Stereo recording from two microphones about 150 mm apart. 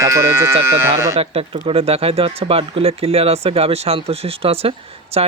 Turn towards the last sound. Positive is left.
turn(degrees=-40)  # may be behind; listen again after turning